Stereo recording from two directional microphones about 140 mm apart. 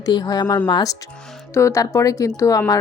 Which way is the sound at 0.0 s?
30° left (ahead or behind).